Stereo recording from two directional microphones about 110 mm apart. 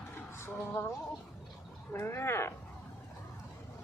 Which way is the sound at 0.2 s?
20° left (ahead or behind).